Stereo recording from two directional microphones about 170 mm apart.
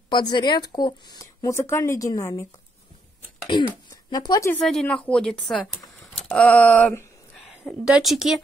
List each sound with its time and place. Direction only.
0.1 s speech: 25° left (ahead or behind)
3.5 s speech: 25° left (ahead or behind)
4.5 s a woman's voice: 5° left (ahead or behind)